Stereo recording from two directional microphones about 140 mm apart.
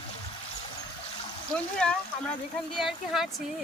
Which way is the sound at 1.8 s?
5° left (ahead or behind).